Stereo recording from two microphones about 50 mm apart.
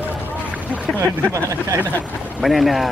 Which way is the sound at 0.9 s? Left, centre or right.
Right.